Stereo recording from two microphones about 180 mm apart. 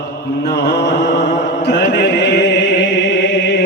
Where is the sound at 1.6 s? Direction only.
70° left (ahead or behind).